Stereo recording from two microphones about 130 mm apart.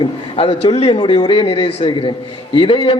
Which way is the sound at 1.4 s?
45° left (ahead or behind).